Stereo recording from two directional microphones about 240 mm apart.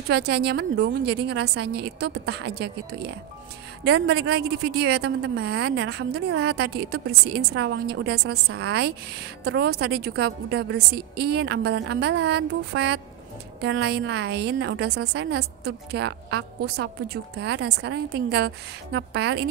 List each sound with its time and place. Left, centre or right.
0.1 s a woman's voice: right